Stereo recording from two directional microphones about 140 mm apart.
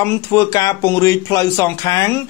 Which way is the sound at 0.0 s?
20° left (ahead or behind).